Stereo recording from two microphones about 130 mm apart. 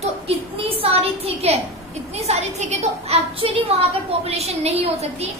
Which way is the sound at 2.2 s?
60° right (ahead or behind).